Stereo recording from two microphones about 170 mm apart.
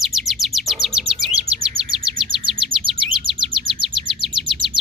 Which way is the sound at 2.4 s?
30° right (ahead or behind).